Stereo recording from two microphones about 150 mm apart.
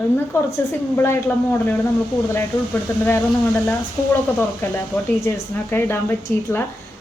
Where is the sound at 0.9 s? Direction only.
15° left (ahead or behind).